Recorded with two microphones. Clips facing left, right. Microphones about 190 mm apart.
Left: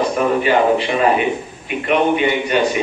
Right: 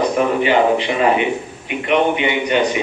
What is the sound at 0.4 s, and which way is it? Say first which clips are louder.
A man's voice: even; 20° right (ahead or behind).